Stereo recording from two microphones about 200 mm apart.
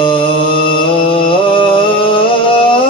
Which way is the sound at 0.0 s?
25° left (ahead or behind).